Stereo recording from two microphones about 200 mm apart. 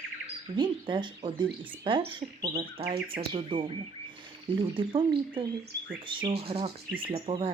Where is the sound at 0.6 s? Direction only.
25° right (ahead or behind).